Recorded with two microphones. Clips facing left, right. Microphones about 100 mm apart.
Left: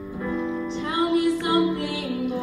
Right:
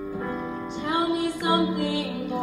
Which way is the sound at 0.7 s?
20° right (ahead or behind).